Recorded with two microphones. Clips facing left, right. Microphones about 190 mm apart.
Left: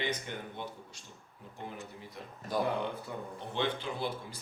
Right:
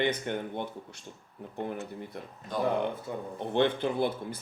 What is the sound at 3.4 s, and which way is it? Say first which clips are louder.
Speech: right 9 dB; 55° right (ahead or behind).